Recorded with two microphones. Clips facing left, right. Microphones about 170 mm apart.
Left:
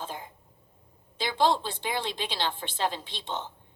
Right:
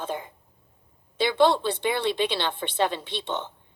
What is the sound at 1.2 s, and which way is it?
A woman's voice, 65° right (ahead or behind).